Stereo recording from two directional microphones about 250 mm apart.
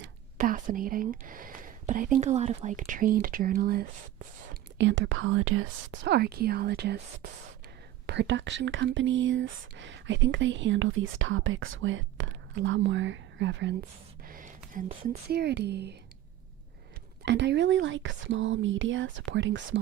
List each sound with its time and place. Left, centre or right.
0.3 s speech: right
4.8 s speech: right
14.3 s a sound: right
14.7 s speech: right
15.3 s speech: right
17.2 s speech: right